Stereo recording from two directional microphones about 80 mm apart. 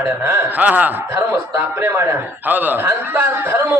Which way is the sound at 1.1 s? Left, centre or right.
Right.